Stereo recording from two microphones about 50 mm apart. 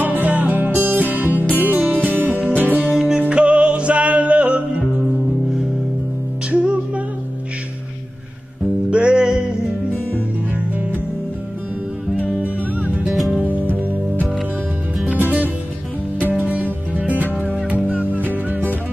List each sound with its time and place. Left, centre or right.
0.0 s music: right
3.2 s music: right
6.5 s music: right
8.9 s music: centre
12.8 s music: right
13.1 s music: centre
13.4 s music: right
16.9 s music: right